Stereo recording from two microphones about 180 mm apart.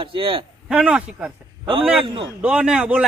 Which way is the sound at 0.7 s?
5° right (ahead or behind).